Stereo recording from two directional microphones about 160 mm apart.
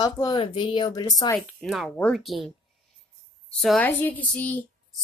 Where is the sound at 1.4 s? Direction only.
Centre (ahead or behind).